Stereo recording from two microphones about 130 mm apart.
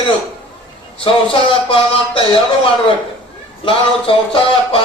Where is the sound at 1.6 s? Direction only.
45° left (ahead or behind).